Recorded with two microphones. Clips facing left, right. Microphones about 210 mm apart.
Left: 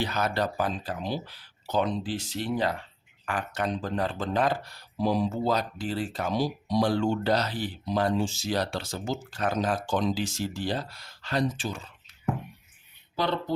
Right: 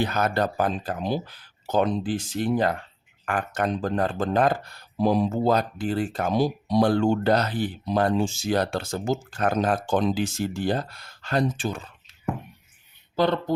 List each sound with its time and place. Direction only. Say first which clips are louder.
0.0 s speech: right 4 dB; 50° right (ahead or behind)
13.1 s speech: right 6 dB; 50° right (ahead or behind)